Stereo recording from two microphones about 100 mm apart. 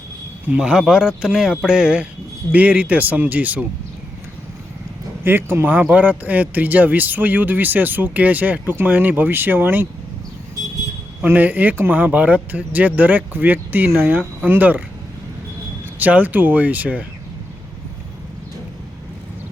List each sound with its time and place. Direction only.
0.4 s speech: 10° right (ahead or behind)
5.2 s speech: 20° right (ahead or behind)
11.2 s speech: 15° right (ahead or behind)
16.0 s speech: 15° right (ahead or behind)